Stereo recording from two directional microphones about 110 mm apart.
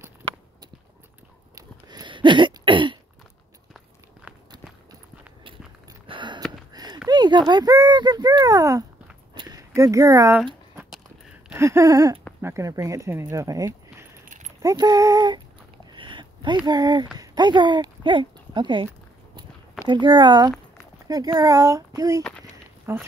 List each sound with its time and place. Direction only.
1.9 s throat clearing: 45° right (ahead or behind)
6.0 s a sound: 45° right (ahead or behind)
7.1 s speech: 40° right (ahead or behind)
9.3 s a sound: 45° right (ahead or behind)
9.8 s speech: 30° right (ahead or behind)
11.5 s speech: 25° right (ahead or behind)
15.9 s a sound: 45° right (ahead or behind)
16.6 s speech: 40° right (ahead or behind)
19.9 s speech: 45° right (ahead or behind); by 23.0 s 25° right (ahead or behind)